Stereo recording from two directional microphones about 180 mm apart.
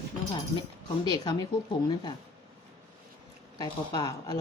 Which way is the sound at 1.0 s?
25° left (ahead or behind).